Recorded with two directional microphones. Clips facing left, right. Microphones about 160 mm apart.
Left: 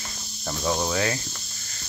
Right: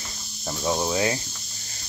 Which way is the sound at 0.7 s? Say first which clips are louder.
Right 3 dB; 20° right (ahead or behind).